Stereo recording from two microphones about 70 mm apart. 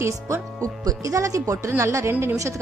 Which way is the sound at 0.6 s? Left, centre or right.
Right.